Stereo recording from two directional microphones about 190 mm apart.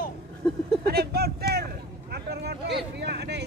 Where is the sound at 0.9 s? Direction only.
55° right (ahead or behind).